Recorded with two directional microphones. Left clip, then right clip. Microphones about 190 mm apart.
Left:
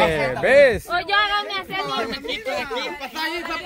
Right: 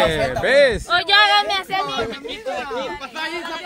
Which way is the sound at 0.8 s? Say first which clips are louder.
Right 5 dB; 65° right (ahead or behind).